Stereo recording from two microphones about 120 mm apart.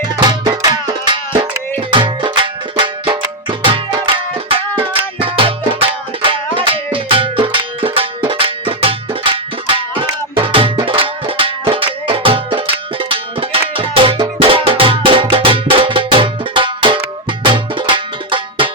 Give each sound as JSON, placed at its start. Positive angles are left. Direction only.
{"t": 0.3, "sound": "music", "side_deg": -35}